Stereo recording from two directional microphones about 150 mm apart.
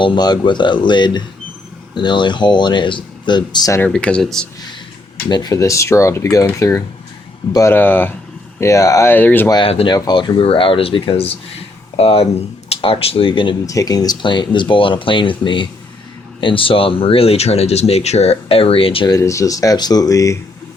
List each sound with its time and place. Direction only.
0.0 s speech: 30° left (ahead or behind)
3.8 s speech: 10° left (ahead or behind)
5.3 s speech: 25° left (ahead or behind)
9.5 s speech: 35° left (ahead or behind)
13.7 s speech: 25° left (ahead or behind)
19.1 s speech: 20° left (ahead or behind)